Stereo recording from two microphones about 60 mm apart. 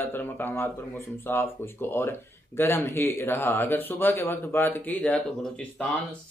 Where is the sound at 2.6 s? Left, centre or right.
Left.